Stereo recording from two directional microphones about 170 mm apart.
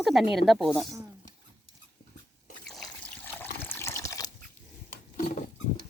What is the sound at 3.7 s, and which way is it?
Water, 15° left (ahead or behind).